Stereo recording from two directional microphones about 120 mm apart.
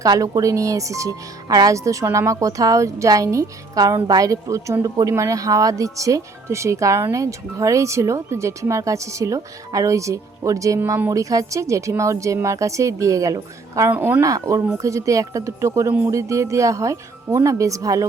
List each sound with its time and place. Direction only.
0.0 s speech: 30° right (ahead or behind)
13.9 s speech: 15° right (ahead or behind)
14.2 s speech: 25° right (ahead or behind)